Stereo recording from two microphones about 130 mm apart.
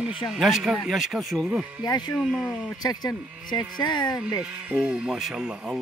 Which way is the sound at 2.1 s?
Centre (ahead or behind).